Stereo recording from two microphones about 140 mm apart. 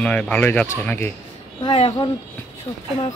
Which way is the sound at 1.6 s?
45° left (ahead or behind).